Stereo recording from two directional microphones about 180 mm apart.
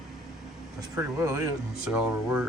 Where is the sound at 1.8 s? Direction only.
5° right (ahead or behind).